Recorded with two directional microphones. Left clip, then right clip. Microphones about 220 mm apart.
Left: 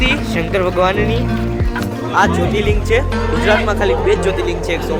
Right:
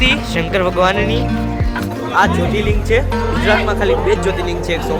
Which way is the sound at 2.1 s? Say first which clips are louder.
Even; 5° left (ahead or behind).